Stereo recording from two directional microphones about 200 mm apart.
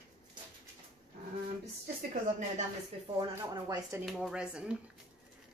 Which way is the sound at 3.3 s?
15° right (ahead or behind).